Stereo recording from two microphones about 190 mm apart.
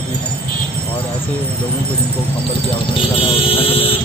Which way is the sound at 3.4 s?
30° left (ahead or behind).